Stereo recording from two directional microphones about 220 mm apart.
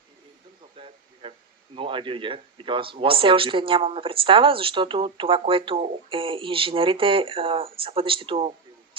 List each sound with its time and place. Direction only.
1.2 s speech: 20° right (ahead or behind)